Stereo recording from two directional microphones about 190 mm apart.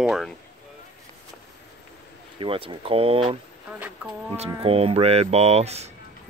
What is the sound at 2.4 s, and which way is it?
Speech, 25° right (ahead or behind).